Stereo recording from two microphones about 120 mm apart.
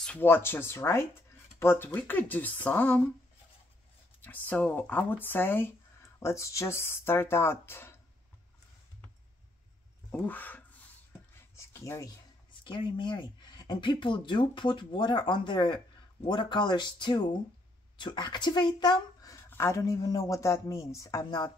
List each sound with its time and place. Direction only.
0.0 s speech: 15° left (ahead or behind)
4.2 s speech: 15° left (ahead or behind)
10.1 s speech: 15° left (ahead or behind)
11.5 s writing: 25° left (ahead or behind)
12.6 s speech: 40° left (ahead or behind)